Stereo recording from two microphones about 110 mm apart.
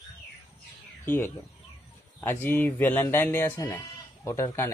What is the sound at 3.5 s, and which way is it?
Speech, 35° left (ahead or behind).